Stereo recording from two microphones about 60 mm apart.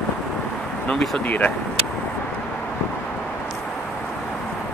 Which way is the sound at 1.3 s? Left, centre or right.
Left.